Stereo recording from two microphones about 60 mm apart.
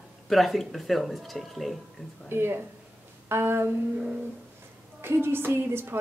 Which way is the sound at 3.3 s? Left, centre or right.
Right.